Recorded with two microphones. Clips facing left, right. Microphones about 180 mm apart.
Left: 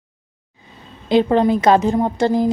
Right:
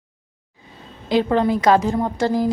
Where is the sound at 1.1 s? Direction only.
20° left (ahead or behind).